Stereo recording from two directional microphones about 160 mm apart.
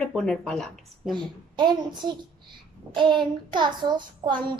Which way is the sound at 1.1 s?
30° right (ahead or behind).